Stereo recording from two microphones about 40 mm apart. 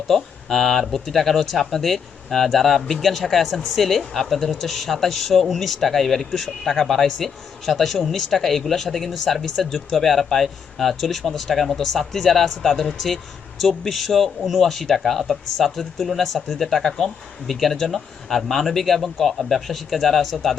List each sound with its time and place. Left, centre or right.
0.1 s speech: centre